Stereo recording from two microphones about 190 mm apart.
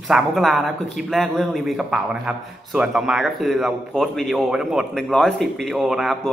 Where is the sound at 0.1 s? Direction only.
Centre (ahead or behind).